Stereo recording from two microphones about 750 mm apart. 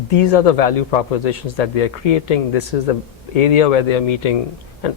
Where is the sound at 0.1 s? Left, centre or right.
Left.